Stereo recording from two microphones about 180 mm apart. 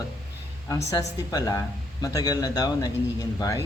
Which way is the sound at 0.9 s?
20° left (ahead or behind).